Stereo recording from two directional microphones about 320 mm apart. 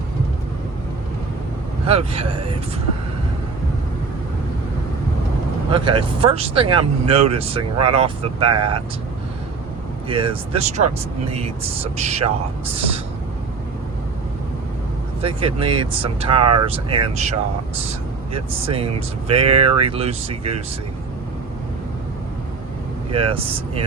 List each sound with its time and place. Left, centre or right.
1.9 s speech: centre
5.7 s speech: centre
10.1 s speech: centre
15.2 s speech: centre
18.3 s speech: centre
23.1 s speech: centre